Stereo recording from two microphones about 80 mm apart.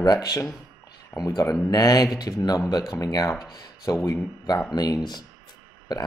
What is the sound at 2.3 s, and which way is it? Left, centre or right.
Speech, left.